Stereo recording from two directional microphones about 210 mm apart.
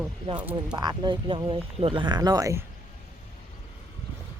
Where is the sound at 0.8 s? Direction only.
20° right (ahead or behind).